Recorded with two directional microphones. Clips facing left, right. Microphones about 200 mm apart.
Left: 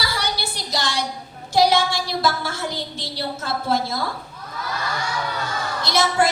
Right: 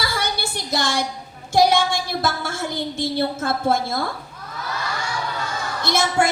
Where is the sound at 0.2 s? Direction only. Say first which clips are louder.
Right 1 dB; 50° right (ahead or behind).